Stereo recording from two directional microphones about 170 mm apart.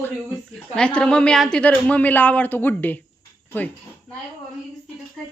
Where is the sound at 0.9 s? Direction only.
5° left (ahead or behind).